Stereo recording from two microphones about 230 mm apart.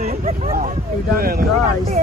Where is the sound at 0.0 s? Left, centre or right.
Right.